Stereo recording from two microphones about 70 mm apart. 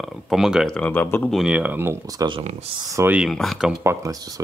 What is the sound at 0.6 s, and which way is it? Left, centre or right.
Speech, centre.